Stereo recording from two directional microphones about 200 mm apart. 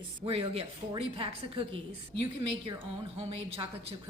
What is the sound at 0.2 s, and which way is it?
A woman's voice, 30° right (ahead or behind).